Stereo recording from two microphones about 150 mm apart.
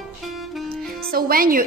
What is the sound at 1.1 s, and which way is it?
Speech, 75° right (ahead or behind).